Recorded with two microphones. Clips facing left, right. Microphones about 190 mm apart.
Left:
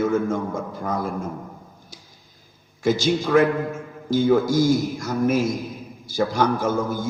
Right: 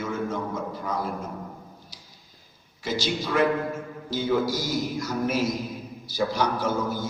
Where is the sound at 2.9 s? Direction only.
50° left (ahead or behind).